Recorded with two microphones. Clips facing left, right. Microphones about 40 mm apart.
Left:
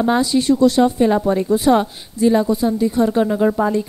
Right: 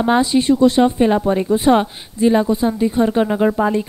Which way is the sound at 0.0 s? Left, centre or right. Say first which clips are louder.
Right 1 dB; right.